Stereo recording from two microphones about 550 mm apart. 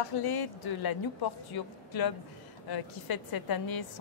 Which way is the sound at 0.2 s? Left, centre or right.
Left.